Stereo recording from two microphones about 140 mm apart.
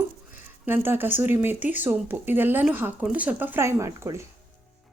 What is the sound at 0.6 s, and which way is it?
Speech, 15° right (ahead or behind).